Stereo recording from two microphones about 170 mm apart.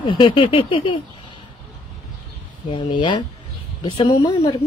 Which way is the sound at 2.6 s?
30° left (ahead or behind).